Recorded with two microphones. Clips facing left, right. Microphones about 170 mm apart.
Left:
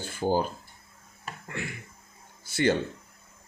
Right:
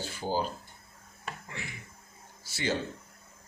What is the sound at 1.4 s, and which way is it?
Speech, 55° left (ahead or behind).